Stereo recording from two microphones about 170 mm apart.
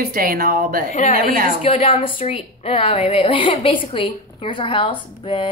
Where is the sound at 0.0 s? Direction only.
60° right (ahead or behind).